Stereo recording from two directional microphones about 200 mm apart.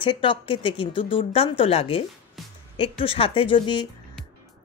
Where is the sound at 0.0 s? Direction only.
25° left (ahead or behind).